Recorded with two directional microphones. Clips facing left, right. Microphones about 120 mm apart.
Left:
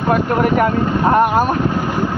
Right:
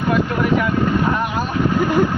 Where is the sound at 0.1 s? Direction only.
45° left (ahead or behind).